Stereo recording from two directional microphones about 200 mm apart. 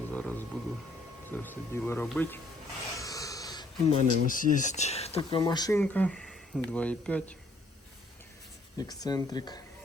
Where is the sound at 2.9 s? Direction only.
15° left (ahead or behind).